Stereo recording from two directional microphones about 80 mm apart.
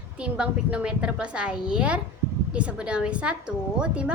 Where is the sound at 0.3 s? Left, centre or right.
Centre.